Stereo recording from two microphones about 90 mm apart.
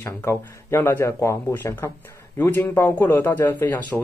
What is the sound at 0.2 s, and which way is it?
Speech, 30° left (ahead or behind).